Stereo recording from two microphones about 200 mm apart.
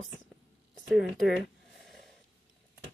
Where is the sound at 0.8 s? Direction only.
Centre (ahead or behind).